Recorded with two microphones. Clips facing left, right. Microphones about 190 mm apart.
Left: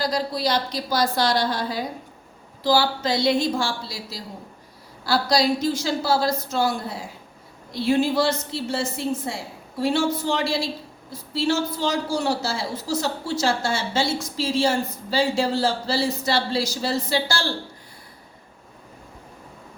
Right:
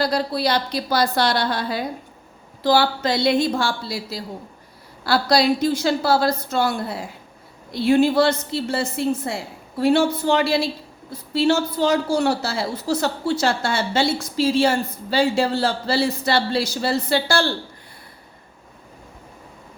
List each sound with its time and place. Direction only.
0.0 s a woman's voice: 65° right (ahead or behind)